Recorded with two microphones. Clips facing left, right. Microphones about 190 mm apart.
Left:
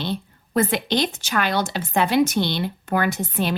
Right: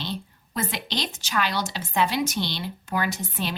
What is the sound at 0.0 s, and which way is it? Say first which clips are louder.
A woman's voice: left 5 dB; 55° left (ahead or behind).